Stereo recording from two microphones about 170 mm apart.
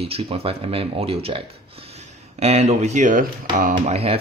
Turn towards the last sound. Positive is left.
turn(degrees=-40)  # may be behind; listen again after turning